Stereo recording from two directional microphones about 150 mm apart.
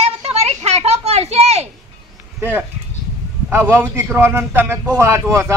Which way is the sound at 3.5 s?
15° right (ahead or behind).